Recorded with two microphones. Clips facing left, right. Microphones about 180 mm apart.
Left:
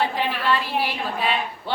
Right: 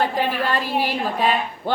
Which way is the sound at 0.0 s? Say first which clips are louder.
Right 2 dB; 45° right (ahead or behind).